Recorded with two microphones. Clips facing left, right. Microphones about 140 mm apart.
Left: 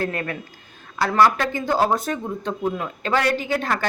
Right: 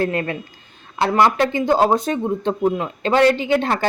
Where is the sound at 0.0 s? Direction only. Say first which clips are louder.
Right 5 dB; 25° right (ahead or behind).